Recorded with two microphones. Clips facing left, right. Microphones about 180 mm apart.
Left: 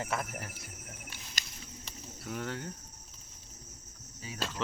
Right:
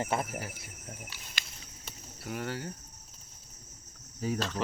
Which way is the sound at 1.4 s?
45° left (ahead or behind).